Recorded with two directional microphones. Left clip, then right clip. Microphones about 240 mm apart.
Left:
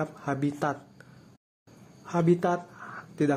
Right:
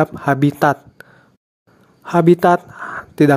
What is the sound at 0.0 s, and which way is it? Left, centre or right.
Speech, right.